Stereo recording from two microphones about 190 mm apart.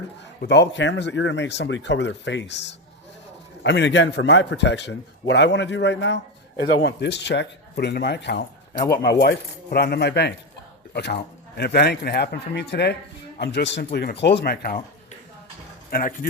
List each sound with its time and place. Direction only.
0.4 s a man's voice: 65° left (ahead or behind)
8.8 s speech: 15° left (ahead or behind)
9.2 s speech: 60° left (ahead or behind)
15.9 s speech: 50° left (ahead or behind)